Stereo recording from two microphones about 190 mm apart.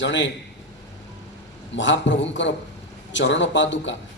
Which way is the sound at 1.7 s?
75° left (ahead or behind).